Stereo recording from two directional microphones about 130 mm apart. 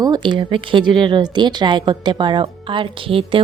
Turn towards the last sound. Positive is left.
turn(degrees=-45)  # may be behind; listen again after turning